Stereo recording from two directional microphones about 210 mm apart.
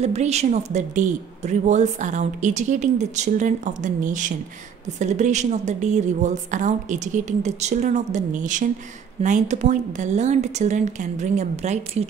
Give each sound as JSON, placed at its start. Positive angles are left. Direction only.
{"t": 0.0, "sound": "a woman's voice", "side_deg": -30}